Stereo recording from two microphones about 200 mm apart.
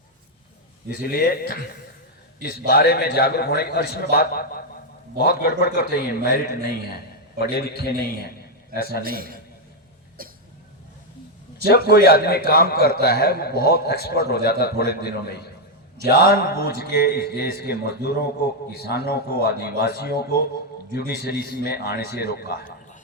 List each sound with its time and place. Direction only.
1.0 s a man's voice: 50° left (ahead or behind)
9.0 s a man's voice: 45° right (ahead or behind)
10.2 s cough: 45° right (ahead or behind)
11.7 s a man's voice: 50° left (ahead or behind)